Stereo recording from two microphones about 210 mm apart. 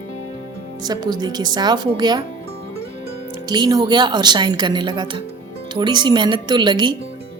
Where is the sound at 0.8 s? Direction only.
20° right (ahead or behind).